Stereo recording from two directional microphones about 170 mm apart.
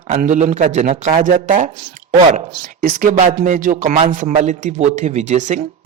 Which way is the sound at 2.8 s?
55° right (ahead or behind).